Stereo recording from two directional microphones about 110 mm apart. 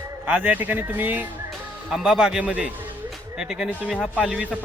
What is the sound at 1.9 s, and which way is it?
A man's voice, 5° right (ahead or behind).